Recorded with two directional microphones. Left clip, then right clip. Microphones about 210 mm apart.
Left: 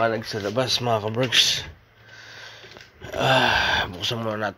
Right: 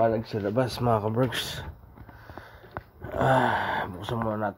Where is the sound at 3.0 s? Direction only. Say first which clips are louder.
Left 3 dB; centre (ahead or behind).